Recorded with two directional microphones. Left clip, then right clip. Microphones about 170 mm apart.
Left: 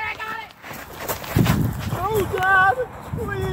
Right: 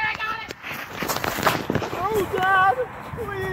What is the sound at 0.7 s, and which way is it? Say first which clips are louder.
Walk: right 3 dB; 50° left (ahead or behind).